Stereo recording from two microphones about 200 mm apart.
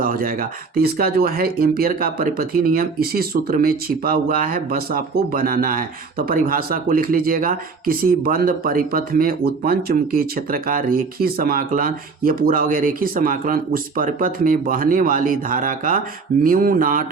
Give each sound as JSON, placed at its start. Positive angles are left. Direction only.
{"t": 0.0, "sound": "speech", "side_deg": -45}